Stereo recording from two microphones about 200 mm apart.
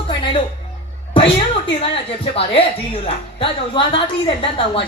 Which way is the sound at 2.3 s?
30° left (ahead or behind).